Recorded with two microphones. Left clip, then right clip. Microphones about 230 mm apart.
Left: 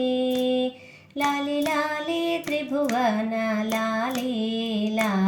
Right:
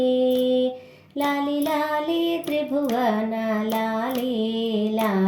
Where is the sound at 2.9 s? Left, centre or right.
Left.